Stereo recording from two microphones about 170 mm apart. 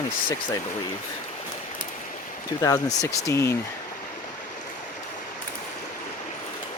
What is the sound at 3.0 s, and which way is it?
Speech, 15° left (ahead or behind).